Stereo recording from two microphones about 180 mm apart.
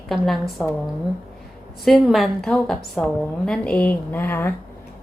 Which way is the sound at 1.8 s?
Centre (ahead or behind).